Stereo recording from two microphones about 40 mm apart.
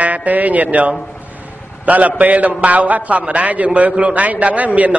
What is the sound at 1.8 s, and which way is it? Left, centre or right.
A man's voice, right.